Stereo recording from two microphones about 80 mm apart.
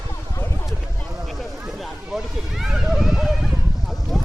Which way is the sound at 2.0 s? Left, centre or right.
Centre.